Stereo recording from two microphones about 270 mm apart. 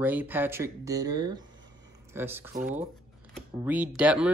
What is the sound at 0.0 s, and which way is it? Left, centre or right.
Speech, centre.